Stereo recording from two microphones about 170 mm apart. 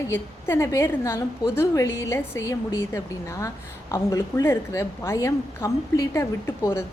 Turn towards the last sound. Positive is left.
turn(degrees=15)  # may be behind; listen again after turning